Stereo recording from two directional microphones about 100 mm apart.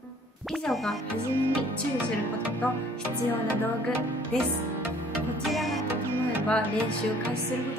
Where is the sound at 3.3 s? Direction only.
20° left (ahead or behind).